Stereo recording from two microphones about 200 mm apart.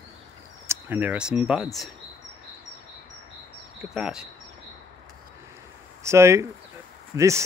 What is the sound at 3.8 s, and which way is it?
Speech, 5° right (ahead or behind).